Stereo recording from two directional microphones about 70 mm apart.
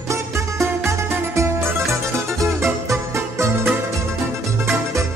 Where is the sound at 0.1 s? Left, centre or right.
Right.